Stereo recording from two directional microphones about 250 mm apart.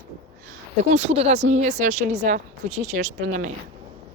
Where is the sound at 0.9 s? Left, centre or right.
Right.